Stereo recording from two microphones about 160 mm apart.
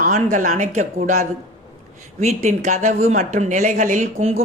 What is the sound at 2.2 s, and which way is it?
Speech, 45° right (ahead or behind).